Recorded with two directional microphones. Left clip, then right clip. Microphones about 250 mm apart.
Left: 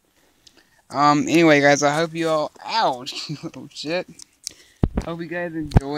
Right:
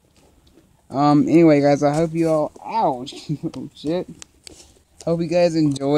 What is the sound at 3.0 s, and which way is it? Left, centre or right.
Speech, left.